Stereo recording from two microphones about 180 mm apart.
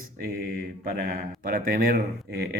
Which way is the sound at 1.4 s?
55° right (ahead or behind).